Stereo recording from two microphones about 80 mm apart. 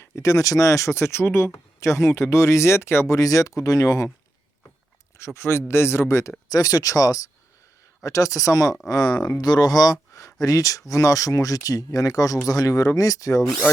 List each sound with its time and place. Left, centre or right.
0.0 s speech: left
5.1 s speech: left
6.5 s speech: left
8.9 s speech: left